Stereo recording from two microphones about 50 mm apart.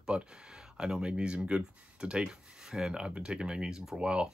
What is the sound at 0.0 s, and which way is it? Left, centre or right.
Speech, centre.